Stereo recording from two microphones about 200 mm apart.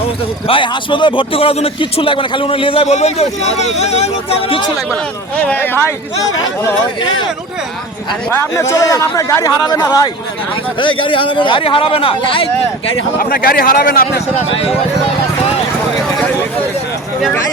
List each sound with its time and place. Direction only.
0.4 s speech: 25° left (ahead or behind)
5.4 s speech: 10° left (ahead or behind)
8.3 s speech: 15° left (ahead or behind)
13.1 s a man's voice: 45° left (ahead or behind)